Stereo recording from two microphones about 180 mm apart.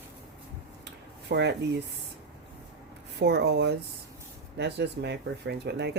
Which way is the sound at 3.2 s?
65° right (ahead or behind).